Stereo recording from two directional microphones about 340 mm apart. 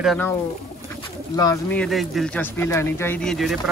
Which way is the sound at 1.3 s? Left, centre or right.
Centre.